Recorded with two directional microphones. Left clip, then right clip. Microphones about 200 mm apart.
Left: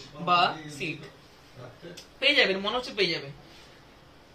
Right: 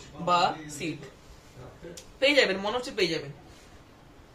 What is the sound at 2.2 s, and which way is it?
Speech, 65° right (ahead or behind).